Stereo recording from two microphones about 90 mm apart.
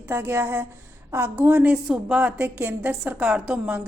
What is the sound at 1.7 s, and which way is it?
A woman's voice, 10° right (ahead or behind).